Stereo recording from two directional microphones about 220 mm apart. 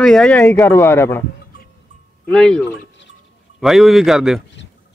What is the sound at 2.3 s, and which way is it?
A man's voice, centre (ahead or behind).